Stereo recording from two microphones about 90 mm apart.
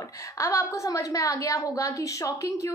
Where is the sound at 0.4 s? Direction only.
35° left (ahead or behind).